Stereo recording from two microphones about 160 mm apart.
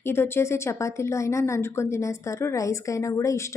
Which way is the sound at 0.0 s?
15° left (ahead or behind).